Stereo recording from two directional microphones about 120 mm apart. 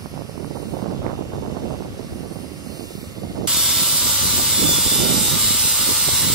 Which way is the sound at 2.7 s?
30° right (ahead or behind).